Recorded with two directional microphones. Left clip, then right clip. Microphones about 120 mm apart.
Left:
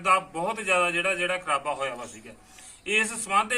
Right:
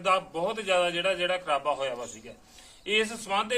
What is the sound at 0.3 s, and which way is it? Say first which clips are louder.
A man's voice: left 1 dB; 25° right (ahead or behind).